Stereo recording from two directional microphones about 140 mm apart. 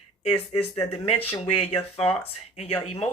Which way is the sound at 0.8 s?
40° left (ahead or behind).